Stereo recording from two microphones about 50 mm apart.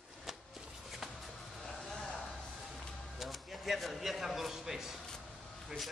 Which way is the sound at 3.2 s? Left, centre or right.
Centre.